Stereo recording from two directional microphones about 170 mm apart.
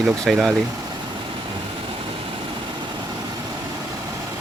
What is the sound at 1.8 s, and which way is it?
Vehicle, 30° right (ahead or behind).